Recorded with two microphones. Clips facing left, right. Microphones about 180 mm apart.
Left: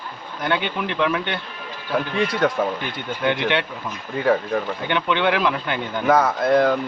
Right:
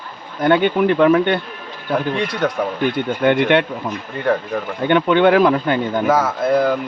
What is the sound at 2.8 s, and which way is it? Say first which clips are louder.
Speech: right 7 dB; 50° right (ahead or behind).